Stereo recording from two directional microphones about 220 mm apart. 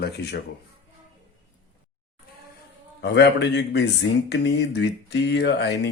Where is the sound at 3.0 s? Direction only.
50° left (ahead or behind).